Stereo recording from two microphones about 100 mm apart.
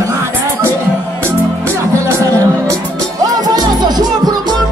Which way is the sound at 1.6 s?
30° right (ahead or behind).